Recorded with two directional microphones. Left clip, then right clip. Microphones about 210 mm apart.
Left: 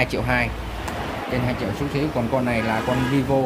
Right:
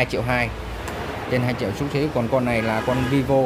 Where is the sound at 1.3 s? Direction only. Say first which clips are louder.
Right 3 dB; 30° right (ahead or behind).